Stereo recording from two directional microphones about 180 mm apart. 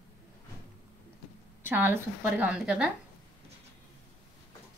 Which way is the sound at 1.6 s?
10° right (ahead or behind).